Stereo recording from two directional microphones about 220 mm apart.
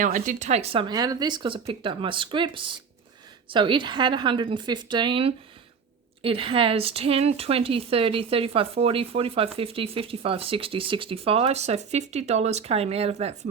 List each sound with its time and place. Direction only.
0.0 s speech: 35° right (ahead or behind)